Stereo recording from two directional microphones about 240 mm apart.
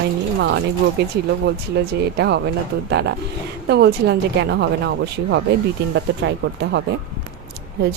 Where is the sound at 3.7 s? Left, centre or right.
Right.